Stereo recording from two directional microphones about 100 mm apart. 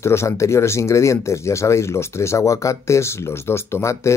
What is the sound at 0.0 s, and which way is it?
Speech, 25° left (ahead or behind).